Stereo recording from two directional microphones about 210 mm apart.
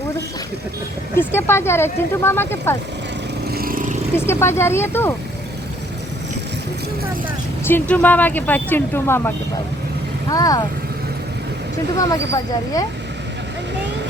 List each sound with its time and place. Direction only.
1.1 s speech: 10° left (ahead or behind)
3.5 s vehicle: 45° right (ahead or behind)
4.3 s speech: 10° left (ahead or behind)
7.6 s speech: 10° left (ahead or behind)
11.9 s speech: 15° left (ahead or behind)